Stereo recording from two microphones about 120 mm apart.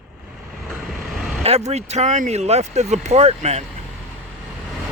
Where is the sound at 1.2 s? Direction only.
5° right (ahead or behind).